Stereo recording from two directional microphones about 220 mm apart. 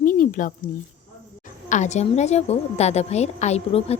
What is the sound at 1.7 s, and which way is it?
A woman's voice, 30° left (ahead or behind).